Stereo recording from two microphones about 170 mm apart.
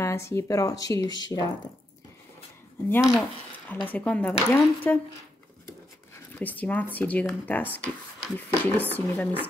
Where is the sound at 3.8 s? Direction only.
10° left (ahead or behind).